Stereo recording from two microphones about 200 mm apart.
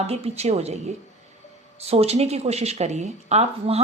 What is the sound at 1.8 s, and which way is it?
Speech, 30° right (ahead or behind).